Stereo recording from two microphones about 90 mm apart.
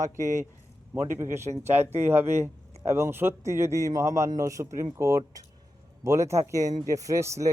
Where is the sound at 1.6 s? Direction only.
25° right (ahead or behind).